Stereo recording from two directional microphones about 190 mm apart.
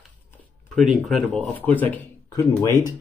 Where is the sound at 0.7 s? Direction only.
Centre (ahead or behind).